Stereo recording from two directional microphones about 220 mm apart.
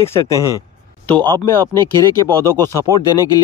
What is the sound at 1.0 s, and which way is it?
Speech, 20° right (ahead or behind).